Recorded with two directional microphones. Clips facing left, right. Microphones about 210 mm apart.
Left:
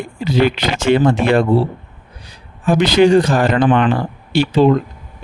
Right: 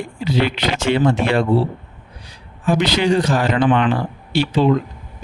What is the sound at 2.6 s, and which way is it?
Speech, 50° left (ahead or behind).